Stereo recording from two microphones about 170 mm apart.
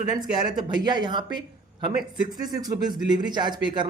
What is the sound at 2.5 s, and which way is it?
Speech, 25° right (ahead or behind).